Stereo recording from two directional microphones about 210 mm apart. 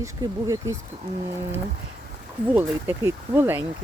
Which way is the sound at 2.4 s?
10° right (ahead or behind).